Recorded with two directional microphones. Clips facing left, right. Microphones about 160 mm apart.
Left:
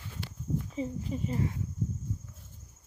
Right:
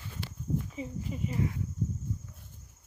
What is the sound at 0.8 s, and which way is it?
Speech, 35° left (ahead or behind).